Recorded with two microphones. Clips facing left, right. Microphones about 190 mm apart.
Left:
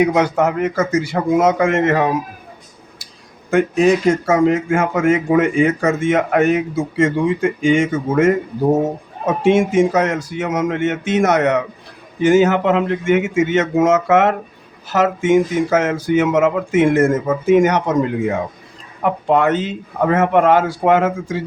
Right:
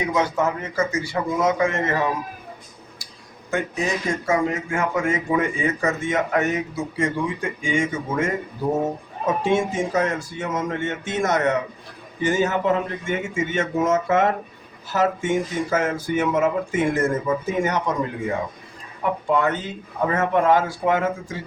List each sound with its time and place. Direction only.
0.0 s speech: 85° left
3.5 s speech: 90° left
19.0 s speech: 90° left